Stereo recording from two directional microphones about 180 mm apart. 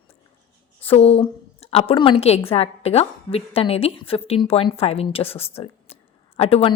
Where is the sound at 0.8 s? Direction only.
35° left (ahead or behind).